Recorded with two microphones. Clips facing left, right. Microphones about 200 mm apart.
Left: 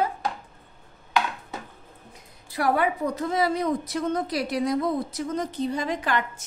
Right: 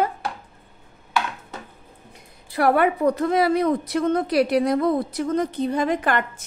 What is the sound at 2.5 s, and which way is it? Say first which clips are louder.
A woman's voice: right 5 dB; 60° right (ahead or behind).